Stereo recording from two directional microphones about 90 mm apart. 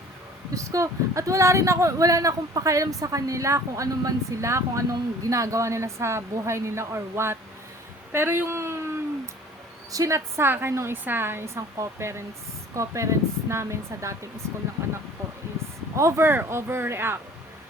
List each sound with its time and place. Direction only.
0.5 s speech: 35° right (ahead or behind)
9.9 s a woman's voice: 35° right (ahead or behind)
16.0 s a woman's voice: 30° right (ahead or behind)